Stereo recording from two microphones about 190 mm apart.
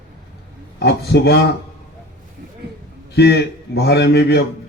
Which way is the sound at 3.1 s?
60° left (ahead or behind).